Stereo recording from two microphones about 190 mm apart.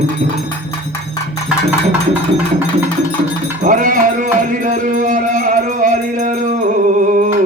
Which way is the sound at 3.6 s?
45° right (ahead or behind).